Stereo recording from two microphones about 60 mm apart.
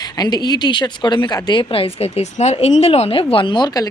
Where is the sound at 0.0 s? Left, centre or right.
Left.